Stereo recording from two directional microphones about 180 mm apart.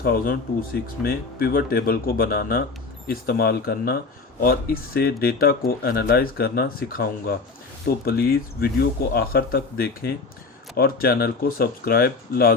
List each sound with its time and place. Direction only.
0.0 s speech: 55° left (ahead or behind)